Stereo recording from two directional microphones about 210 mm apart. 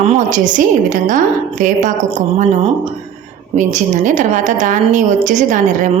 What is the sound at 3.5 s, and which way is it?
A woman's voice, 35° right (ahead or behind).